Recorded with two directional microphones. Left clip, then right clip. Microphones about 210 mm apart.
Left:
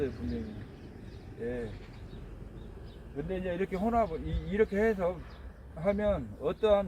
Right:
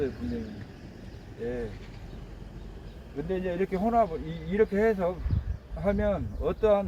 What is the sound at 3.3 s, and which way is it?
A man's voice, 5° right (ahead or behind).